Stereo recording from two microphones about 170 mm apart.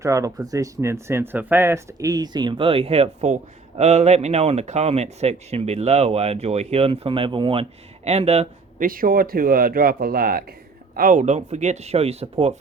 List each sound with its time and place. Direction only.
0.0 s speech: 20° right (ahead or behind); by 8.9 s 40° right (ahead or behind)
8.9 s speech: 55° right (ahead or behind); by 12.5 s 35° right (ahead or behind)